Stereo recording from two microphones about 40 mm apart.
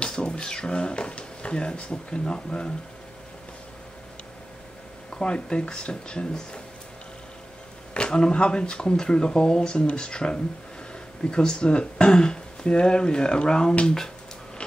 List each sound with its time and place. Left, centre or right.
0.0 s a sound: centre
5.2 s speech: left
7.9 s speech: left